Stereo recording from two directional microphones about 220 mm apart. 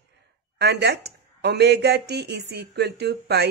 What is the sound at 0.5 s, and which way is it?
Speech, 50° right (ahead or behind).